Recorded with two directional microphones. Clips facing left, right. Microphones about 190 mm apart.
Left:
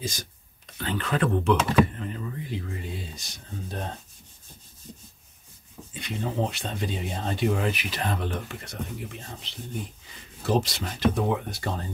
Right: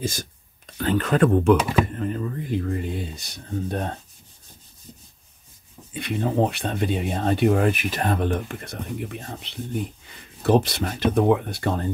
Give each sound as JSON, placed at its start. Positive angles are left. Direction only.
{"t": 0.0, "sound": "speech", "side_deg": -55}
{"t": 5.9, "sound": "speech", "side_deg": -60}